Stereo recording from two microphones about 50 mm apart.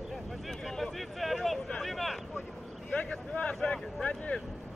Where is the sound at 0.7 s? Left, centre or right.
Centre.